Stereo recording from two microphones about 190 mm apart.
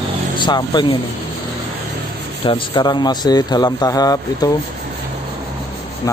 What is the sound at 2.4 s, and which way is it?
Speech, 25° left (ahead or behind).